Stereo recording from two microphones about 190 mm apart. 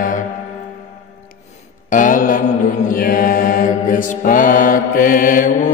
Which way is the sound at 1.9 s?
45° left (ahead or behind).